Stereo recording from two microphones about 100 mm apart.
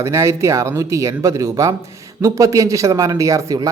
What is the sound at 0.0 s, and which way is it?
Speech, 30° right (ahead or behind).